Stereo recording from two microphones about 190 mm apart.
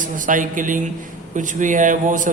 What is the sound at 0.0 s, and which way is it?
Speech, 45° right (ahead or behind).